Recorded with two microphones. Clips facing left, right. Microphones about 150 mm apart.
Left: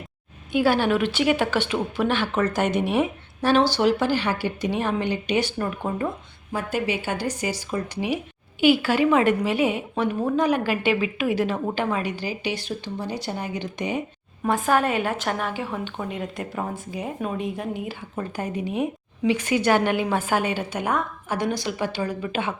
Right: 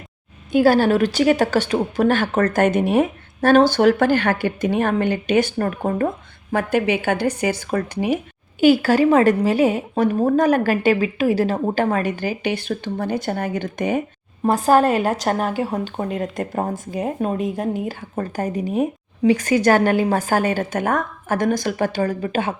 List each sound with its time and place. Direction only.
0.5 s speech: 40° right (ahead or behind)
6.5 s speech: 65° right (ahead or behind)
8.6 s speech: 40° right (ahead or behind)
14.4 s a woman's voice: 35° right (ahead or behind)